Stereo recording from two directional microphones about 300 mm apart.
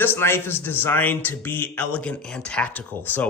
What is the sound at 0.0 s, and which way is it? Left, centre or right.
A man's voice, centre.